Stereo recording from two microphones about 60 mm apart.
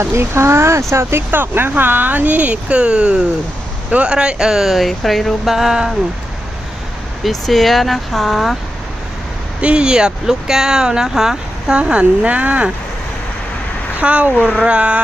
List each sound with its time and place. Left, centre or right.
0.0 s speech: right; by 5.9 s centre
7.3 s speech: centre
9.6 s speech: centre
11.8 s speech: centre
14.0 s speech: right